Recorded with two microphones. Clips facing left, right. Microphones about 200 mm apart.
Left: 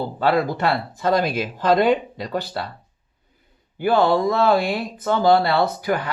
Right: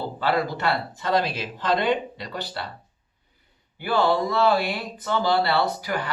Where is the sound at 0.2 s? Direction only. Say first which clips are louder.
Left 5 dB; 50° left (ahead or behind).